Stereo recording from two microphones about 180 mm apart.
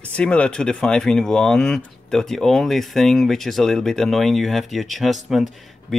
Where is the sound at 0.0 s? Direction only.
5° left (ahead or behind).